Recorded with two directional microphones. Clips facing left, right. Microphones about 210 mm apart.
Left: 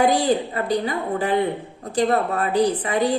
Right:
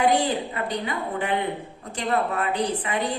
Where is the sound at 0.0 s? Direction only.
35° left (ahead or behind).